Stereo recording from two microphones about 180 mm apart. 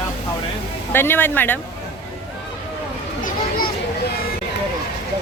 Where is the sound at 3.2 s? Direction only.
55° left (ahead or behind).